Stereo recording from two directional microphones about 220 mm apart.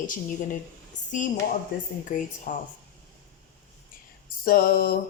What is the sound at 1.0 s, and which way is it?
Speech, 35° left (ahead or behind).